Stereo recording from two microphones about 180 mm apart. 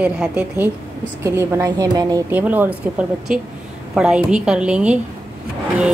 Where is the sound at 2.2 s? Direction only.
10° right (ahead or behind).